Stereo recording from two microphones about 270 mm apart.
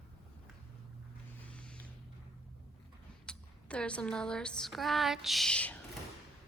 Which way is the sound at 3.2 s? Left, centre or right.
Centre.